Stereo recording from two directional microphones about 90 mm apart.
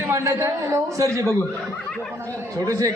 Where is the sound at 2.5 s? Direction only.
40° right (ahead or behind).